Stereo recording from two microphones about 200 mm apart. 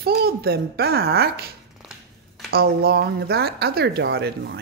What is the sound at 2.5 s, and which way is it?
Speech, 50° right (ahead or behind).